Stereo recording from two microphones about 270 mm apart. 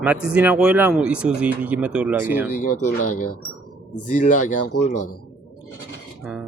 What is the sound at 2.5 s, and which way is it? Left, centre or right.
Speech, left.